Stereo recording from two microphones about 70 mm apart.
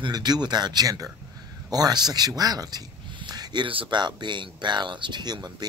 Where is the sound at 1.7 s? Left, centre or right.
Right.